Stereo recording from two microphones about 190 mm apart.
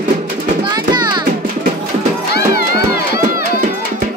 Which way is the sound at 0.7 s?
20° right (ahead or behind).